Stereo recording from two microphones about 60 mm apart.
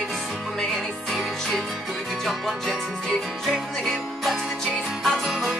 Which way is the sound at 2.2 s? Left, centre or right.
Centre.